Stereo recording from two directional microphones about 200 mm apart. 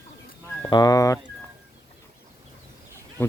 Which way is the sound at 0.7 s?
20° left (ahead or behind).